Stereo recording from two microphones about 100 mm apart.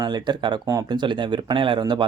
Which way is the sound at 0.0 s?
50° right (ahead or behind).